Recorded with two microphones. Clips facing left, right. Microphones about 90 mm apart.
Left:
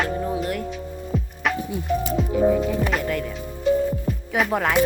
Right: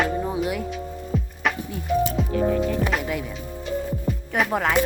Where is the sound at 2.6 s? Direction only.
Centre (ahead or behind).